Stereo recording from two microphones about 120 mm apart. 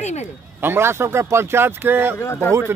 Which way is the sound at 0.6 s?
20° right (ahead or behind).